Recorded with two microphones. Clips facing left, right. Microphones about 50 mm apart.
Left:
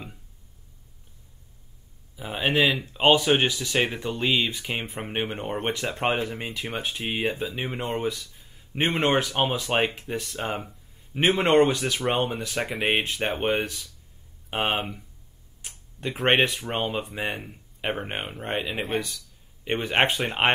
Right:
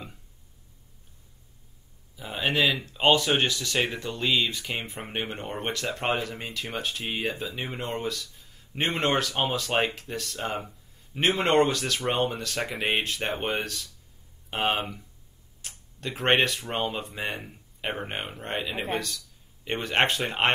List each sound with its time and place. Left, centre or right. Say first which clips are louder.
2.1 s speech: left 3 dB; centre
11.7 s speech: left 2 dB; centre
13.3 s speech: left 4 dB; centre
15.6 s a sound: left 3 dB; centre
16.2 s speech: left 2 dB; centre
16.4 s speech: left 1 dB; centre